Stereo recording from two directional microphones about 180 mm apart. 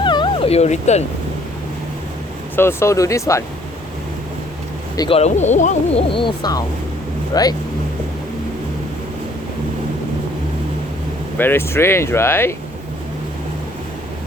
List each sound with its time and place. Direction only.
0.0 s cat: 25° left (ahead or behind)
2.6 s speech: 15° left (ahead or behind)
4.9 s speech: 30° left (ahead or behind)
6.1 s speech: 25° left (ahead or behind)
11.3 s speech: 10° left (ahead or behind)